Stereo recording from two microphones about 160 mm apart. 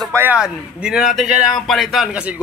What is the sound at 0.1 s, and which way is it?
A man's voice, 10° right (ahead or behind).